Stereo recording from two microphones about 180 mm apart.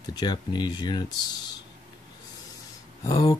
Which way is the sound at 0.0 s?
20° left (ahead or behind).